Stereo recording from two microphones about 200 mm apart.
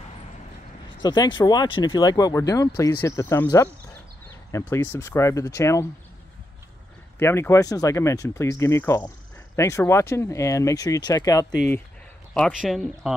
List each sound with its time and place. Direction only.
1.0 s speech: 20° left (ahead or behind)
7.2 s speech: 10° left (ahead or behind)
12.4 s speech: centre (ahead or behind)